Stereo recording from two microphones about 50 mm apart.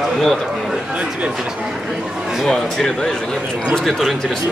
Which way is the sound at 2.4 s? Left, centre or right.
Centre.